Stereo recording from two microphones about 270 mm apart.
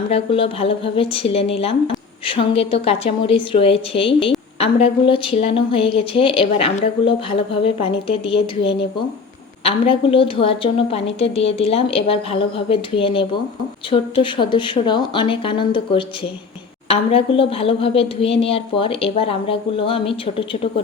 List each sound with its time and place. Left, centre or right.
0.1 s speech: centre